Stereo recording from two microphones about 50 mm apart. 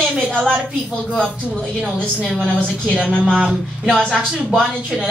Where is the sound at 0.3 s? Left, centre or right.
Centre.